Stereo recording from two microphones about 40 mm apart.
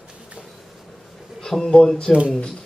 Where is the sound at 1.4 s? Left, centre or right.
Centre.